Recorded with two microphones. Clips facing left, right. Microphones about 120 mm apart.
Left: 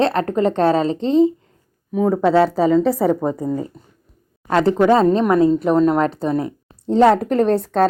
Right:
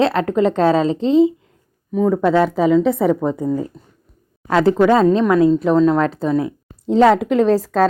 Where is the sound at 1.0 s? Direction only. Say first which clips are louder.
Right 1 dB; 35° left (ahead or behind).